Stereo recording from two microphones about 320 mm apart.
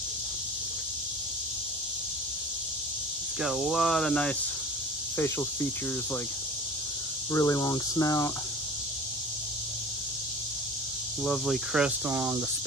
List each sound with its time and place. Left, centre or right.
3.4 s cricket: centre
5.1 s speech: centre
7.3 s speech: centre
11.2 s cricket: centre